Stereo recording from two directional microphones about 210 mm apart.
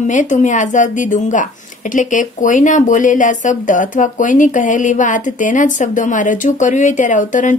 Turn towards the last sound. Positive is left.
turn(degrees=35)  # may be behind; listen again after turning